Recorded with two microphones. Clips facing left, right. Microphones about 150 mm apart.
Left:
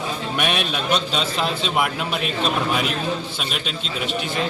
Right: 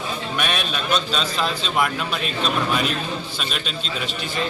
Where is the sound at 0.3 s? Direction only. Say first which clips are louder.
Left 3 dB; 15° left (ahead or behind).